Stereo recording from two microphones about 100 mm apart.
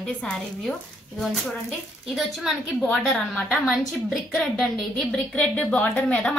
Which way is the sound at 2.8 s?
10° left (ahead or behind).